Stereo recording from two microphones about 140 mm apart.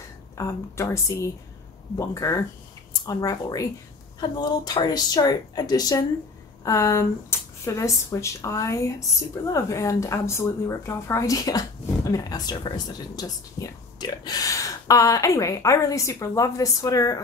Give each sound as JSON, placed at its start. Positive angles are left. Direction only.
{"t": 0.4, "sound": "speech", "side_deg": 20}